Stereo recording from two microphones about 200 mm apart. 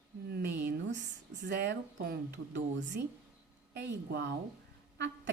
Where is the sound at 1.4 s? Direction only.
55° right (ahead or behind).